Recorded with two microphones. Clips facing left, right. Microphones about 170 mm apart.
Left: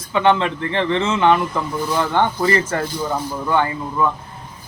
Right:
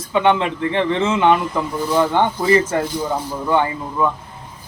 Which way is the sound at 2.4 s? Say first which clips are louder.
Right 3 dB; 15° right (ahead or behind).